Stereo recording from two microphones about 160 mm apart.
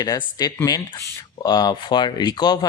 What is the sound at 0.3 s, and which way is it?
Speech, 25° left (ahead or behind).